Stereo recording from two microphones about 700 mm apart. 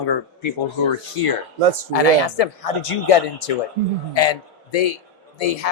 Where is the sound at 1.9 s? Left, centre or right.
Left.